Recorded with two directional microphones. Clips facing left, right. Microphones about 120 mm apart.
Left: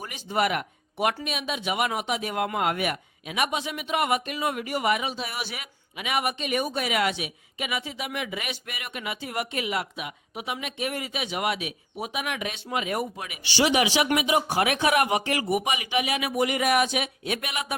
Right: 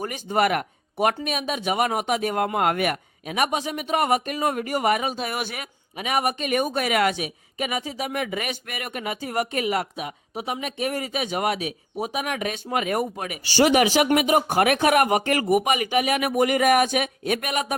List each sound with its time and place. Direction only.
0.0 s a man's voice: 45° right (ahead or behind)